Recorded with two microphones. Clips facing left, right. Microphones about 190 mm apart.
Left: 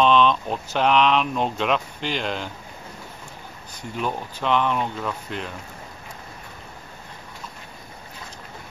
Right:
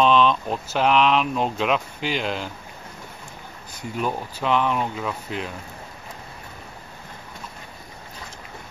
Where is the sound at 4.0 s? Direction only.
10° right (ahead or behind).